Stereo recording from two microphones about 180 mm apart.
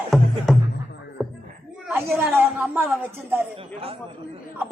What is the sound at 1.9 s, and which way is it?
A woman's voice, 15° right (ahead or behind).